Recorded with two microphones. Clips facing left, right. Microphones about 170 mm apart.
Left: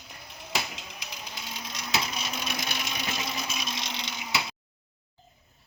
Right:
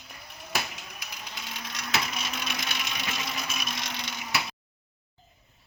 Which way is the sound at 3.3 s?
25° left (ahead or behind).